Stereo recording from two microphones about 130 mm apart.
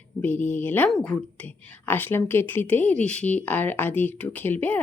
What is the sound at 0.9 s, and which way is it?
Speech, centre (ahead or behind).